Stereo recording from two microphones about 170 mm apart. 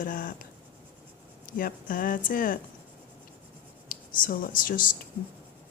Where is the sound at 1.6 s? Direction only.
55° left (ahead or behind).